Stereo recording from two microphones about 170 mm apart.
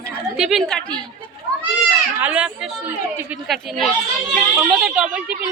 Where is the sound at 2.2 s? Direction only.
10° right (ahead or behind).